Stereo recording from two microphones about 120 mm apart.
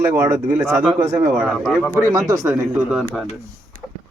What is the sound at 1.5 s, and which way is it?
Speech, 5° left (ahead or behind).